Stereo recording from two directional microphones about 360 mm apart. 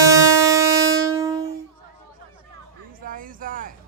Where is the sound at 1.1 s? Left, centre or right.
Centre.